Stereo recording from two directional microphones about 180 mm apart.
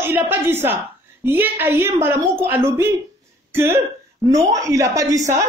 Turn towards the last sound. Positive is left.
turn(degrees=-20)  # may be behind; listen again after turning